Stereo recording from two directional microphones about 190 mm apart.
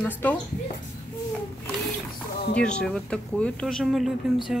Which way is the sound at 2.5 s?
5° left (ahead or behind).